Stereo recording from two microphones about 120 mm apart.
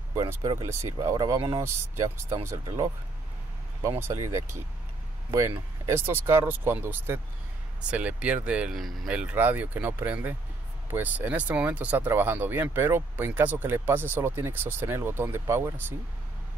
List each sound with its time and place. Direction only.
0.4 s speech: 30° right (ahead or behind)
4.0 s speech: 25° right (ahead or behind)
5.9 s speech: 20° right (ahead or behind)